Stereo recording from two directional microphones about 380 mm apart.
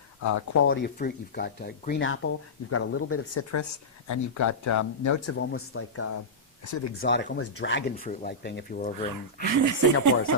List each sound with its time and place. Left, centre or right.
0.2 s speech: left
0.7 s speech: left
5.3 s speech: left
9.6 s speech: right